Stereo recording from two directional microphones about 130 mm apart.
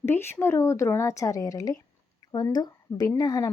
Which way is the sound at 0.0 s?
20° left (ahead or behind).